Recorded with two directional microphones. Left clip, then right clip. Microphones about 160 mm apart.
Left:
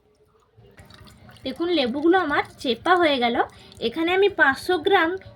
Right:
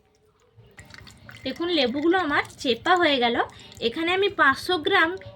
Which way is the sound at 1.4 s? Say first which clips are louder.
Left 1 dB; 15° left (ahead or behind).